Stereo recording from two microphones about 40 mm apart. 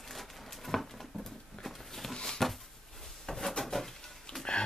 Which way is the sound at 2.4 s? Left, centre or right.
Centre.